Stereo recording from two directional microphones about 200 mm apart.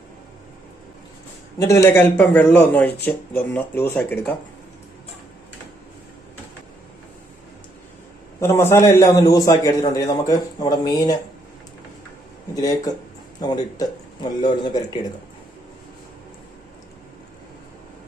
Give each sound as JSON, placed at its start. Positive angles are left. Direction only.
{"t": 1.5, "sound": "a man's voice", "side_deg": 15}
{"t": 8.4, "sound": "a man's voice", "side_deg": 15}
{"t": 12.5, "sound": "a man's voice", "side_deg": 20}